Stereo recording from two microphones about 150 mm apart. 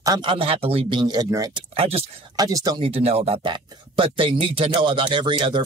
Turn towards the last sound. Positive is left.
turn(degrees=-30)  # may be behind; listen again after turning